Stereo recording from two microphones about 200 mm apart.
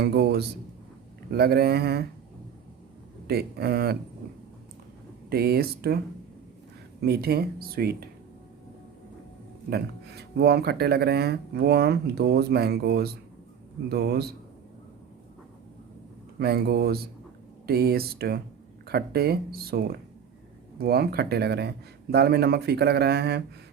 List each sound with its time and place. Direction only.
0.0 s speech: 55° right (ahead or behind)
3.2 s speech: 55° right (ahead or behind)
5.3 s speech: 50° right (ahead or behind)
7.0 s speech: 50° right (ahead or behind)
9.6 s speech: 50° right (ahead or behind)
16.4 s speech: 55° right (ahead or behind)